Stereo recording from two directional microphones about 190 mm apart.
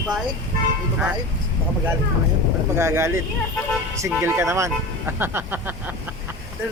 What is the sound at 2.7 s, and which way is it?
Speech, 15° right (ahead or behind).